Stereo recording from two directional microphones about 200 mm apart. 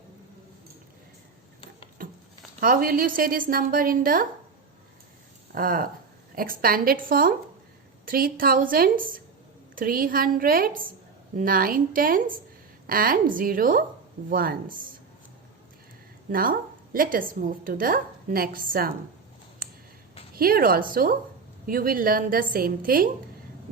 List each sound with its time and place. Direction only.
2.0 s a sound: 45° right (ahead or behind)
2.6 s a woman's voice: 45° right (ahead or behind)
5.5 s a woman's voice: 45° right (ahead or behind)
16.3 s a woman's voice: 45° right (ahead or behind)
20.3 s a woman's voice: 45° right (ahead or behind)